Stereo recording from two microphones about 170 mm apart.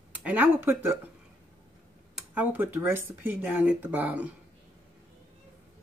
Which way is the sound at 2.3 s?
10° right (ahead or behind).